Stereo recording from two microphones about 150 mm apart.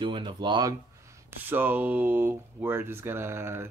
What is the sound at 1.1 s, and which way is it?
Speech, 15° right (ahead or behind).